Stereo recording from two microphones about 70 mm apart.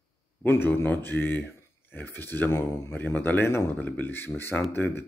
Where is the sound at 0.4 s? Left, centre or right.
Left.